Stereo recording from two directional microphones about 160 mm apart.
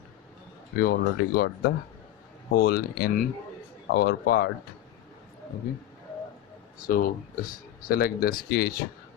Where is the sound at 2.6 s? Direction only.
75° left (ahead or behind).